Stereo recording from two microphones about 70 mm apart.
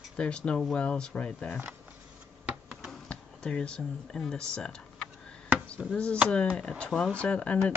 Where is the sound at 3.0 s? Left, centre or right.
Centre.